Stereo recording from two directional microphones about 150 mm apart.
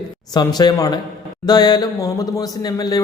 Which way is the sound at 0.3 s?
25° left (ahead or behind).